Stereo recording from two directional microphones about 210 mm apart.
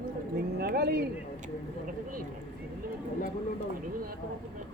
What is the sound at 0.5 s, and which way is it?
Speech, 50° right (ahead or behind).